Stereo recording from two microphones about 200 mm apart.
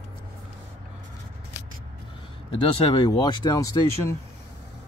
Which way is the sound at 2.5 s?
20° left (ahead or behind).